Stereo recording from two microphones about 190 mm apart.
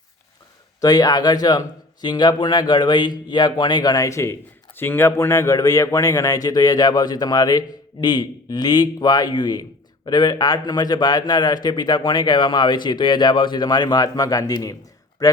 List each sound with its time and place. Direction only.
0.8 s speech: 20° left (ahead or behind)